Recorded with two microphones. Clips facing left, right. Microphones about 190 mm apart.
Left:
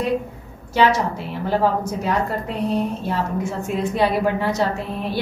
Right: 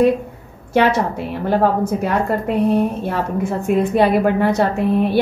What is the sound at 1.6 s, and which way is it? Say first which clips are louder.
A woman's voice: right 5 dB; 55° right (ahead or behind).